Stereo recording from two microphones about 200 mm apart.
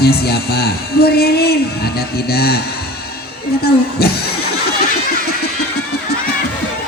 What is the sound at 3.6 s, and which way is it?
Speech, 50° left (ahead or behind).